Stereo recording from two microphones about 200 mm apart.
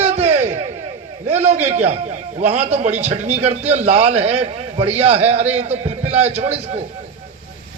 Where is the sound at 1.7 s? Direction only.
35° right (ahead or behind).